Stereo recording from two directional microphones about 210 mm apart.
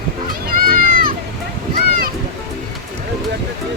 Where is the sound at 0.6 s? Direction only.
45° right (ahead or behind).